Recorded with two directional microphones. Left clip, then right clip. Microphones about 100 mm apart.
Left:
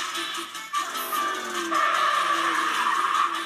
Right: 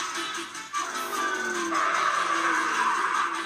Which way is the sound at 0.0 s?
55° left (ahead or behind).